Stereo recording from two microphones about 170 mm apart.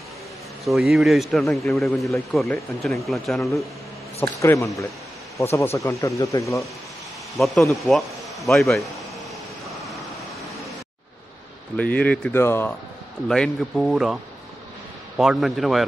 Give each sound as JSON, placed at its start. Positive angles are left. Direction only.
{"t": 0.7, "sound": "speech", "side_deg": 0}
{"t": 4.2, "sound": "speech", "side_deg": 15}
{"t": 7.3, "sound": "speech", "side_deg": 0}
{"t": 11.7, "sound": "speech", "side_deg": 10}
{"t": 13.3, "sound": "speech", "side_deg": 0}
{"t": 15.1, "sound": "speech", "side_deg": 0}